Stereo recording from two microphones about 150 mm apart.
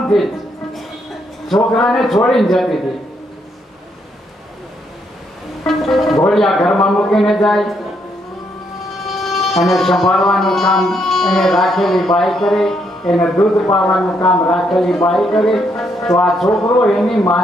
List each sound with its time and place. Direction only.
0.1 s speech: centre (ahead or behind)
1.5 s speech: 5° left (ahead or behind)
5.7 s speech: centre (ahead or behind)
9.1 s speech: centre (ahead or behind)